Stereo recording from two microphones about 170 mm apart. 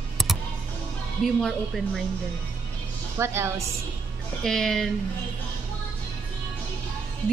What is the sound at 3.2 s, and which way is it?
Speech, 15° right (ahead or behind).